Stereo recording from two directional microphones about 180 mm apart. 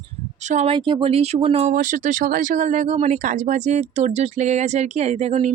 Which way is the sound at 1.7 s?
45° right (ahead or behind).